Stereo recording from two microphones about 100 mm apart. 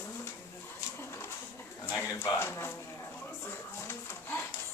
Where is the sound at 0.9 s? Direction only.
25° left (ahead or behind).